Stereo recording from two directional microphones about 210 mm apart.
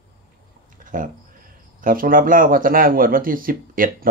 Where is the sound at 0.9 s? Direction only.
40° right (ahead or behind).